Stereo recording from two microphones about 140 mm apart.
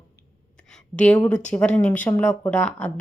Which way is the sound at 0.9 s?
10° left (ahead or behind).